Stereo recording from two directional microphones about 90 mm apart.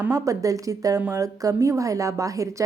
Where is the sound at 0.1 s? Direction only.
40° right (ahead or behind).